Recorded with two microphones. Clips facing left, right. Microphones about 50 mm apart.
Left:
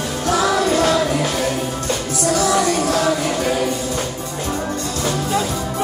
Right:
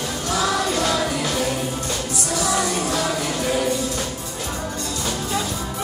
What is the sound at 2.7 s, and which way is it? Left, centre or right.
Music, left.